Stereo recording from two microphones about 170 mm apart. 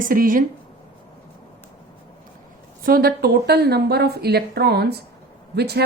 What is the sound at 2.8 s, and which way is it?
A woman's voice, 60° right (ahead or behind).